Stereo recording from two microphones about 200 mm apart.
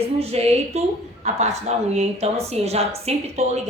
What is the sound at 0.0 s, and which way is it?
A woman's voice, 30° right (ahead or behind).